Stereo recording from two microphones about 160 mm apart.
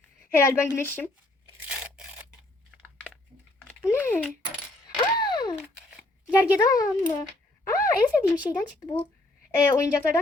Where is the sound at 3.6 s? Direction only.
10° left (ahead or behind).